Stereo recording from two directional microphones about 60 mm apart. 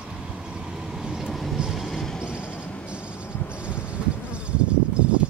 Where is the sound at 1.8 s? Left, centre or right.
Centre.